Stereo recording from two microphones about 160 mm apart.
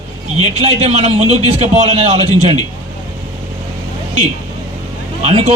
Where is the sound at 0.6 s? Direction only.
40° right (ahead or behind).